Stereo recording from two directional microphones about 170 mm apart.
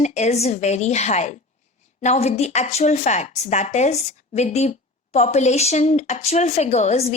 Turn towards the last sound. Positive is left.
turn(degrees=40)  # may be behind; listen again after turning